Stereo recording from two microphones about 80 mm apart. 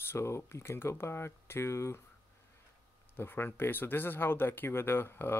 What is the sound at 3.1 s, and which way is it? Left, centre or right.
Speech, left.